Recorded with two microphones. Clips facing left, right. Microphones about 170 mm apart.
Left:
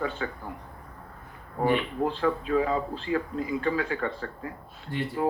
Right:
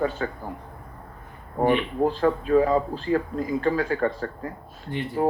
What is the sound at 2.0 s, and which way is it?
Speech, 40° right (ahead or behind).